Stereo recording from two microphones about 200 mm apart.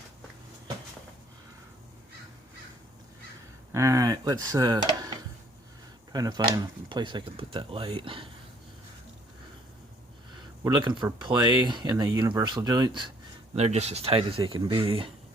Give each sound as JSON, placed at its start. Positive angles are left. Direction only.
{"t": 3.7, "sound": "speech", "side_deg": -15}
{"t": 6.1, "sound": "speech", "side_deg": -20}
{"t": 10.6, "sound": "speech", "side_deg": -20}
{"t": 13.6, "sound": "speech", "side_deg": -35}